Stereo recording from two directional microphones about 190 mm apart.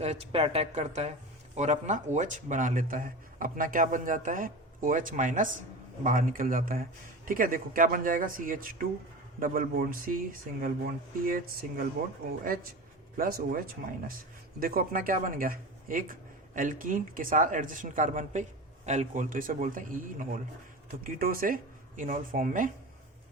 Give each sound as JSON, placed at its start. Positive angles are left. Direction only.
{"t": 0.0, "sound": "speech", "side_deg": -35}
{"t": 13.1, "sound": "speech", "side_deg": -50}